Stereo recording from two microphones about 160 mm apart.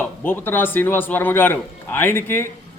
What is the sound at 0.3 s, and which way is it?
A man's voice, 15° left (ahead or behind).